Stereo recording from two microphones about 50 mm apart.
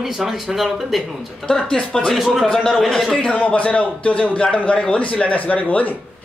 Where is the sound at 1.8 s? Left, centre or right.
Left.